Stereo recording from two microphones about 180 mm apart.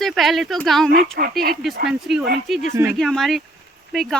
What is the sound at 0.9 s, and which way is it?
Speech, 55° right (ahead or behind).